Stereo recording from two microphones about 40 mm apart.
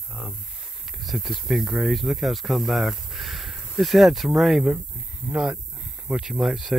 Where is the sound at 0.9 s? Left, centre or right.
Centre.